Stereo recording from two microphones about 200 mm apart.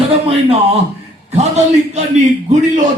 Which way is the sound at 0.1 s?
30° right (ahead or behind).